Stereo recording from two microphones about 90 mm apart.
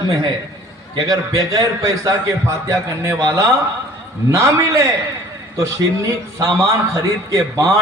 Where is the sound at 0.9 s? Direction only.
45° right (ahead or behind).